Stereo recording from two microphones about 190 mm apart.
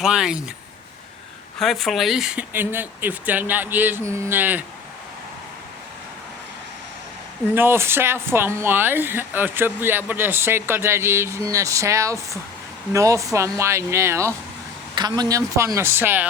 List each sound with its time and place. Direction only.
0.0 s speech: 5° right (ahead or behind)
1.5 s speech: centre (ahead or behind)
7.5 s speech: 10° right (ahead or behind)